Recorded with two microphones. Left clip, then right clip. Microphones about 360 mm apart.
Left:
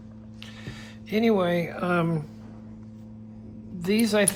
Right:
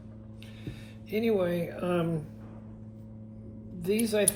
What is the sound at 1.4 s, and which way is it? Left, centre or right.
Speech, centre.